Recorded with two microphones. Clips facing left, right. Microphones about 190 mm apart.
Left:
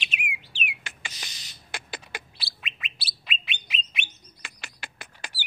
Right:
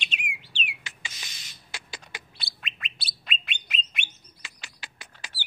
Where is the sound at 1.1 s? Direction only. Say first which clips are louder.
Left 2 dB; 35° left (ahead or behind).